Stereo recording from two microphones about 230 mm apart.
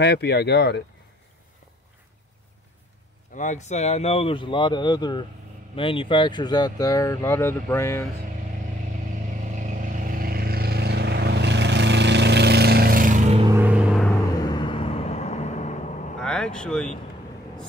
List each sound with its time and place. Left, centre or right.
0.0 s speech: left
3.3 s speech: left; by 8.1 s centre
9.6 s vehicle: right
13.5 s vehicle: centre
14.4 s vehicle: centre
16.2 s vehicle: centre